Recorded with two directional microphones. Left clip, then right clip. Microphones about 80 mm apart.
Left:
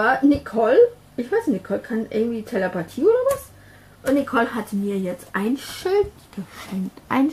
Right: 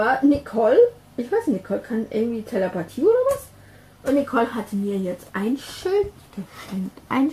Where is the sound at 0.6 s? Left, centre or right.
Left.